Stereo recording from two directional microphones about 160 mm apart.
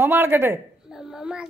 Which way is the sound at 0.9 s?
5° right (ahead or behind).